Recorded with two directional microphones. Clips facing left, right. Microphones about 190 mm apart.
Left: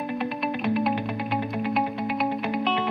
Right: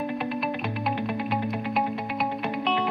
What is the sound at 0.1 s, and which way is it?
Music, centre (ahead or behind).